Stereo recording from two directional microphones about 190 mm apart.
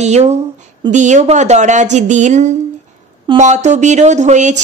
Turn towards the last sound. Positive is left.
turn(degrees=-40)  # may be behind; listen again after turning